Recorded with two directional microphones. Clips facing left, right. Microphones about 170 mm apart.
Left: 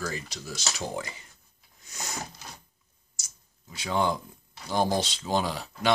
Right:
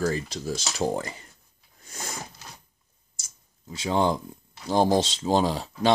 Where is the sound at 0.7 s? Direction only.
45° right (ahead or behind).